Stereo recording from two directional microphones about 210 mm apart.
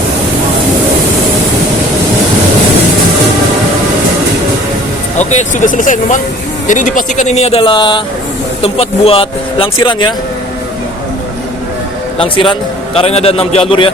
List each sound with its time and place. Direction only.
5.1 s a man's voice: 35° left (ahead or behind)
12.2 s a man's voice: 25° left (ahead or behind)